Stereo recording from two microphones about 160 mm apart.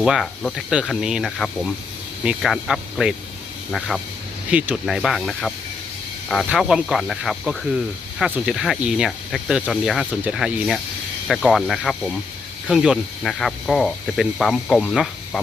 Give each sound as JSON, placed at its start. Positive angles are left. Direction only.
{"t": 0.0, "sound": "speech", "side_deg": 0}